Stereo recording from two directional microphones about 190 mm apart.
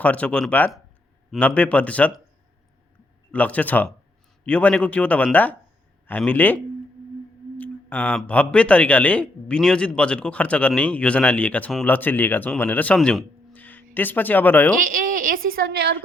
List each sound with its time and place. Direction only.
0.0 s speech: 5° left (ahead or behind)
3.3 s speech: 5° left (ahead or behind)
7.6 s speech: 10° left (ahead or behind)
14.8 s speech: 45° right (ahead or behind)